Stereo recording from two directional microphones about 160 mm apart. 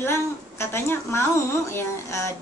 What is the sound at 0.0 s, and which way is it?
A woman's voice, 15° left (ahead or behind).